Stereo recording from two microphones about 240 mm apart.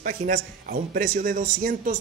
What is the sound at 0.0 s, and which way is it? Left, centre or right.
A man's voice, right.